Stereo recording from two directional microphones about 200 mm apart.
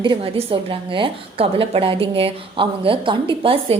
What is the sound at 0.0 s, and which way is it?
A woman's voice, 25° right (ahead or behind).